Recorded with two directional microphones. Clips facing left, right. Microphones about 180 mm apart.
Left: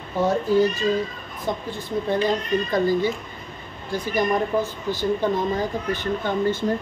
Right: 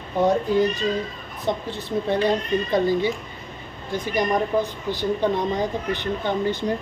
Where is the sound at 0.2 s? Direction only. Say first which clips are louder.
Even; 15° right (ahead or behind).